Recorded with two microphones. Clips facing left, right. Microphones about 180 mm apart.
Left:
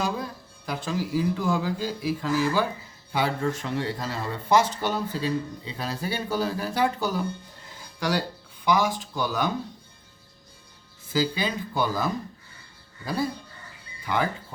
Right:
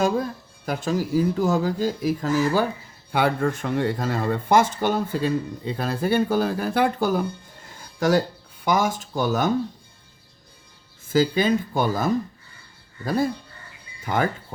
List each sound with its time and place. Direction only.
0.6 s speech: 45° right (ahead or behind)
3.1 s speech: 60° right (ahead or behind)
11.1 s speech: 50° right (ahead or behind)
14.0 s speech: 45° right (ahead or behind)